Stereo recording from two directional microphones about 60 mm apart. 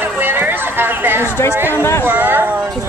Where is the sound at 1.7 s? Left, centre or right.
Left.